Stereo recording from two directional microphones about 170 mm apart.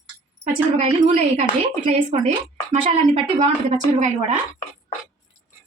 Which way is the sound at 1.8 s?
45° right (ahead or behind).